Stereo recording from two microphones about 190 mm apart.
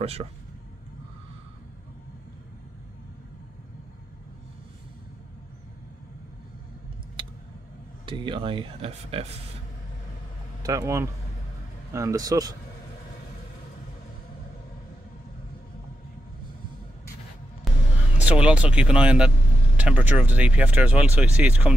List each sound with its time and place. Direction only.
0.0 s speech: 30° right (ahead or behind)
7.2 s a sound: 25° right (ahead or behind)
8.0 s speech: 25° right (ahead or behind)
10.6 s speech: 15° right (ahead or behind)
17.7 s a sound: centre (ahead or behind)
18.1 s speech: 5° right (ahead or behind)